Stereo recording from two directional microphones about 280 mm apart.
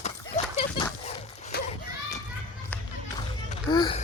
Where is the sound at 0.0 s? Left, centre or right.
Left.